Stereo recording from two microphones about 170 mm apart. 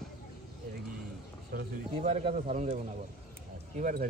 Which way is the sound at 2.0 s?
40° right (ahead or behind).